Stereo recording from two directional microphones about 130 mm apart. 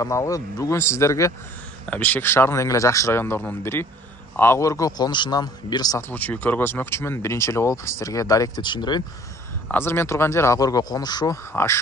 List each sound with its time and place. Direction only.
0.0 s speech: 25° left (ahead or behind)
1.9 s speech: 10° left (ahead or behind); by 6.0 s 30° left (ahead or behind)
6.0 s speech: 10° left (ahead or behind); by 9.0 s 35° left (ahead or behind)
9.7 s speech: 20° left (ahead or behind)
11.5 s speech: 20° left (ahead or behind)